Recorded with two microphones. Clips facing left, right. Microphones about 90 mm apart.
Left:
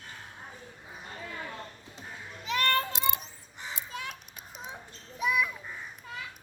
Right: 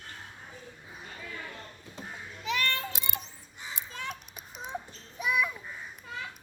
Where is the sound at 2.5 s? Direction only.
45° left (ahead or behind).